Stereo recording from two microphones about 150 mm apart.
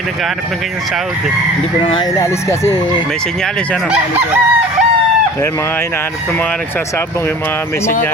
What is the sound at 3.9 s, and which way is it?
Chicken, 10° right (ahead or behind).